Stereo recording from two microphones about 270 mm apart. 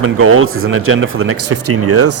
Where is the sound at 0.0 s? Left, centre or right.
Right.